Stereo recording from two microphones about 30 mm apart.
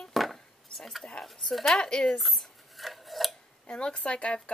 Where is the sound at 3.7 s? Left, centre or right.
Left.